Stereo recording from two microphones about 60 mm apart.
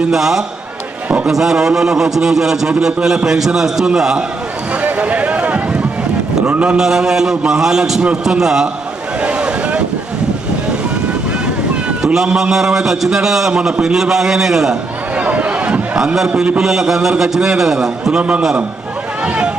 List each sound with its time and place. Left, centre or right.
0.1 s a man's voice: centre
1.0 s a sound: right
1.3 s a man's voice: centre
4.7 s a sound: right
6.7 s a man's voice: centre
9.2 s waves: centre
12.1 s a man's voice: centre
15.1 s a sound: right
16.6 s a man's voice: centre
18.2 s a man's voice: right